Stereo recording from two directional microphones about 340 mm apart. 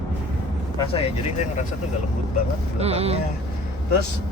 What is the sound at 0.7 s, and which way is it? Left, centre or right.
Speech, centre.